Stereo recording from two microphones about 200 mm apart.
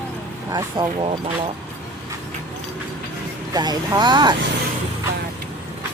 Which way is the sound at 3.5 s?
20° right (ahead or behind).